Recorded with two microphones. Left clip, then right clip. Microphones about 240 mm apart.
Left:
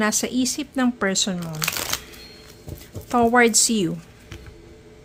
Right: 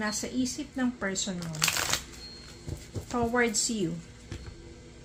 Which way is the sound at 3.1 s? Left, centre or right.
Left.